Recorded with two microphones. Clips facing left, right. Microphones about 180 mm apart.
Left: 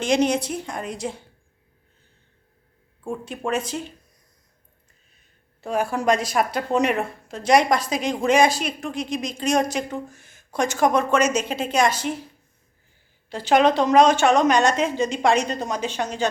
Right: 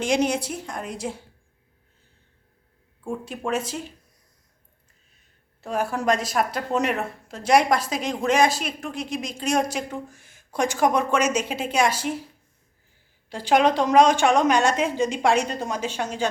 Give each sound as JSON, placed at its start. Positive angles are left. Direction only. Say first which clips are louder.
{"t": 0.0, "sound": "a woman's voice", "louder": "left 2 dB", "side_deg": -10}
{"t": 3.1, "sound": "a woman's voice", "louder": "left 1 dB", "side_deg": -5}
{"t": 5.6, "sound": "a woman's voice", "louder": "left 2 dB", "side_deg": 0}
{"t": 13.3, "sound": "a woman's voice", "louder": "left 2 dB", "side_deg": -10}